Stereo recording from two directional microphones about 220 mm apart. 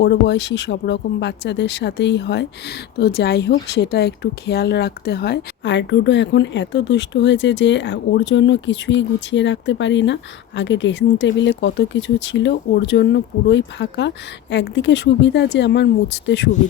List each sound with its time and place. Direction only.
0.0 s speech: 50° left (ahead or behind)